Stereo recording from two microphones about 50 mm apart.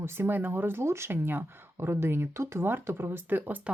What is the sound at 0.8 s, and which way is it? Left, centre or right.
Speech, right.